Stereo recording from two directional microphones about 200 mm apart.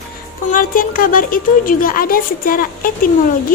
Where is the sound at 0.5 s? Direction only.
40° left (ahead or behind).